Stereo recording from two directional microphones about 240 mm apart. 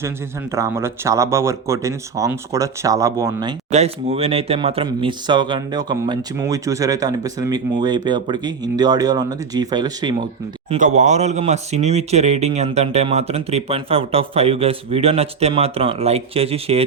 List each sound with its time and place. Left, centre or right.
0.5 s speech: centre
3.7 s speech: right
10.7 s speech: right